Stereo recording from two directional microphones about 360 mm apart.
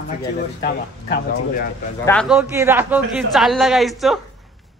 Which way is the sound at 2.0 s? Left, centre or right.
Centre.